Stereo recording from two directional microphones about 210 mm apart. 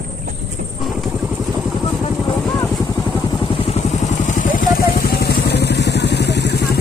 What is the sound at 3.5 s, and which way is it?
Vehicle, 30° left (ahead or behind).